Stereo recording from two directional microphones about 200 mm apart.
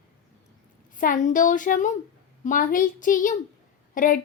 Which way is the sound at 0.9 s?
40° left (ahead or behind).